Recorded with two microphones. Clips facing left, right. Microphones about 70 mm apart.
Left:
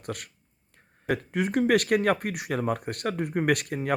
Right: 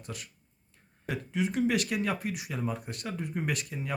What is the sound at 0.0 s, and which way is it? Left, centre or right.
Speech, left.